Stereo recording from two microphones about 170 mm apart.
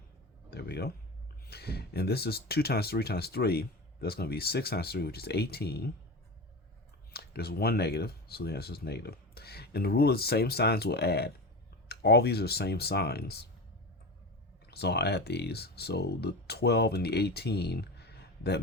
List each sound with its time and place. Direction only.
0.5 s speech: 70° left (ahead or behind)
7.1 s speech: 70° left (ahead or behind)
14.7 s speech: 70° left (ahead or behind)